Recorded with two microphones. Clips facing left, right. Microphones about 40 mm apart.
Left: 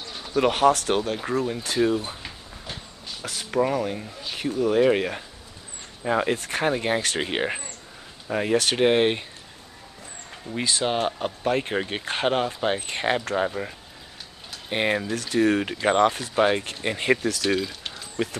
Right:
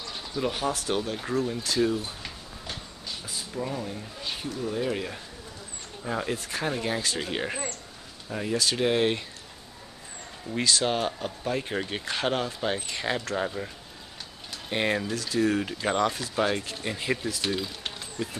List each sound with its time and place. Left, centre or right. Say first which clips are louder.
0.3 s speech: left 10 dB; left
1.3 s speech: left 1 dB; left
2.2 s a sound: left 1 dB; centre
3.3 s speech: left 10 dB; left
10.6 s speech: left 1 dB; left
11.0 s speech: left 4 dB; left
11.7 s speech: left 3 dB; left
12.5 s speech: left 4 dB; centre
12.8 s speech: left 5 dB; left
13.4 s speech: left 5 dB; left
14.7 s speech: left 3 dB; centre
15.1 s speech: left 4 dB; left